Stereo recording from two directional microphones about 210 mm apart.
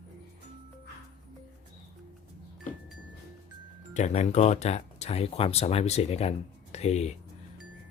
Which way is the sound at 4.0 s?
30° left (ahead or behind).